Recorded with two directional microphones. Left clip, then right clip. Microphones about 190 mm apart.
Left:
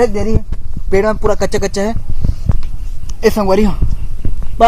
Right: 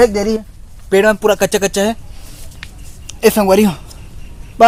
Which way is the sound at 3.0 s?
Centre (ahead or behind).